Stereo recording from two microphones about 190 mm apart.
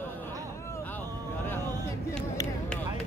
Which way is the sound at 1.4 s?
10° left (ahead or behind).